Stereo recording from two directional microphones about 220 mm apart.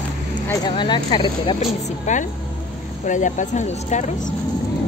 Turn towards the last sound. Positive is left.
turn(degrees=35)  # may be behind; listen again after turning